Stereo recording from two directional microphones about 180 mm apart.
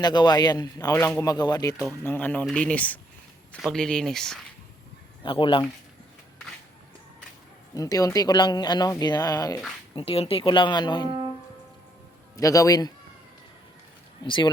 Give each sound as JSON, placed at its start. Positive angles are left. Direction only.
{"t": 0.0, "sound": "speech", "side_deg": 25}
{"t": 2.0, "sound": "speech", "side_deg": 10}
{"t": 5.2, "sound": "speech", "side_deg": 30}
{"t": 7.7, "sound": "speech", "side_deg": 20}
{"t": 9.9, "sound": "speech", "side_deg": 30}
{"t": 12.4, "sound": "speech", "side_deg": 20}
{"t": 14.3, "sound": "speech", "side_deg": 25}